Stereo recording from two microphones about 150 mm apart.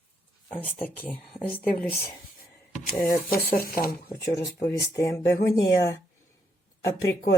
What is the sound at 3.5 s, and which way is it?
Speech, 75° left (ahead or behind).